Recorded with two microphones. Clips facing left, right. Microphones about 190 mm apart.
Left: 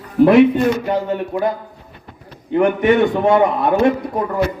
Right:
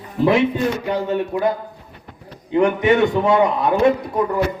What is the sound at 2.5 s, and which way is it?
A man's voice, 55° left (ahead or behind).